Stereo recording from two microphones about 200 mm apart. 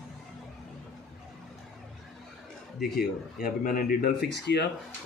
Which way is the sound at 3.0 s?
45° left (ahead or behind).